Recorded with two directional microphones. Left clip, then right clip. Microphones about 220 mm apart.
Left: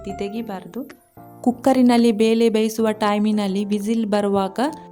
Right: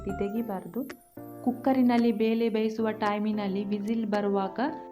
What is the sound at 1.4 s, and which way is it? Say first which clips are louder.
A woman's voice: left 9 dB; 45° left (ahead or behind).